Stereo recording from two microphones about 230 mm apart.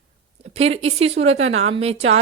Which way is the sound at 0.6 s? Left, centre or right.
Right.